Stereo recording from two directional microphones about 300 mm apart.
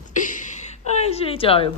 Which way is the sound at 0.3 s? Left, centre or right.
Left.